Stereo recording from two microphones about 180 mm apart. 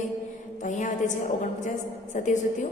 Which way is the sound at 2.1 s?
45° left (ahead or behind).